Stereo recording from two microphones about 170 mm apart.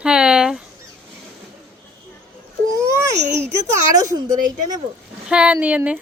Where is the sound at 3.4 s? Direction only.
15° right (ahead or behind).